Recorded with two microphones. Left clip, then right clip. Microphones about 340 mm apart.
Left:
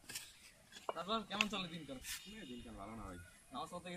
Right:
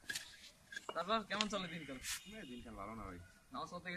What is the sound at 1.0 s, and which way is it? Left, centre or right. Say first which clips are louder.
Speech: right 1 dB; centre.